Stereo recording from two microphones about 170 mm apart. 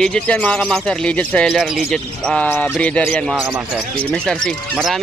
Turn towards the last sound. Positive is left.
turn(degrees=0)  # may be behind; listen again after turning